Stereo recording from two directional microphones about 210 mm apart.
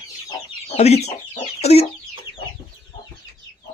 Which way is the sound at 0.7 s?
30° left (ahead or behind).